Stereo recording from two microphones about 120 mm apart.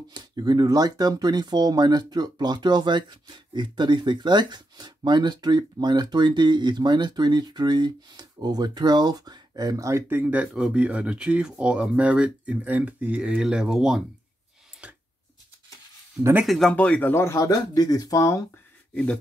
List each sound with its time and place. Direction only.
0.1 s speech: 35° right (ahead or behind); by 14.0 s 5° right (ahead or behind)
14.8 s a sound: 10° right (ahead or behind)
16.2 s speech: 15° right (ahead or behind)
16.4 s speech: centre (ahead or behind)
17.1 s speech: 25° left (ahead or behind)